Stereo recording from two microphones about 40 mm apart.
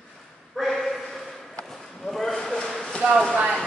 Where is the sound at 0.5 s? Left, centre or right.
Centre.